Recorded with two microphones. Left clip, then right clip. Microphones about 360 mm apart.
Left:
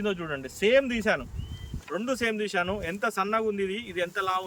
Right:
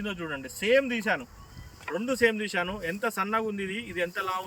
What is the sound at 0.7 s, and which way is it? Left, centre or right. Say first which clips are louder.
Speech: left 1 dB; left.